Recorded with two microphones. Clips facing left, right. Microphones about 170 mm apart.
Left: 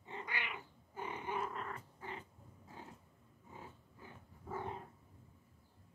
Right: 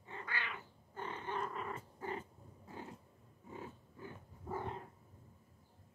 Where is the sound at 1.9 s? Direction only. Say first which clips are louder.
Right 5 dB; 45° right (ahead or behind).